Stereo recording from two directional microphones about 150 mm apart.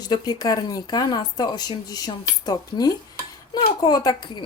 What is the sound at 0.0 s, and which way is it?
Speech, 25° left (ahead or behind).